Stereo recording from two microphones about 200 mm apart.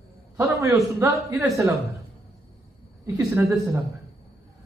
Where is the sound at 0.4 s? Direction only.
15° right (ahead or behind).